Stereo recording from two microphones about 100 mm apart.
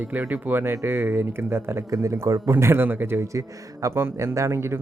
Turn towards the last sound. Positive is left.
turn(degrees=-25)  # may be behind; listen again after turning